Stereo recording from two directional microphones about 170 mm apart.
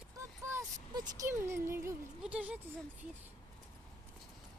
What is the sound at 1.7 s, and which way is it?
Music, 15° right (ahead or behind).